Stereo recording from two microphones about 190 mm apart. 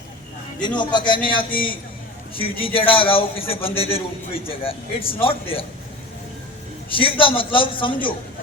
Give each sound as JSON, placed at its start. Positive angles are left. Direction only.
{"t": 0.6, "sound": "a man's voice", "side_deg": 25}
{"t": 6.9, "sound": "a man's voice", "side_deg": 25}